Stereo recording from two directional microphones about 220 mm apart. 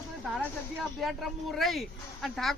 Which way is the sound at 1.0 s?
Centre (ahead or behind).